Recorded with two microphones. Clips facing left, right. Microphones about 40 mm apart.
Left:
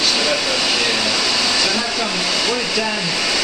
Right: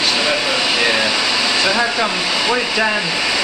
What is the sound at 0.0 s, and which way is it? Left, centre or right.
Speech, centre.